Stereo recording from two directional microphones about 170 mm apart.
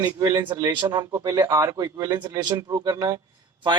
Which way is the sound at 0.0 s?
25° right (ahead or behind).